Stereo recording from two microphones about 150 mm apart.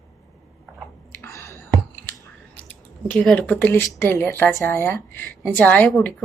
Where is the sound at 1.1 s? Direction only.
20° left (ahead or behind).